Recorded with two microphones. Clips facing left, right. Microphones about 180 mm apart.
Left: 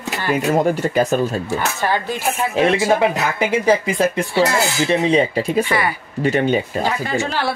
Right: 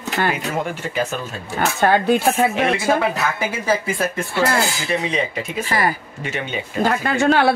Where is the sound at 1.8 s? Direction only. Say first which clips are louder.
Right 5 dB; 60° right (ahead or behind).